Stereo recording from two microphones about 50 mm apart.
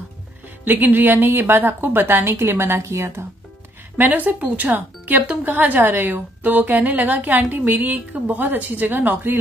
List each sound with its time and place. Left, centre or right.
0.7 s a woman's voice: right
4.0 s a woman's voice: right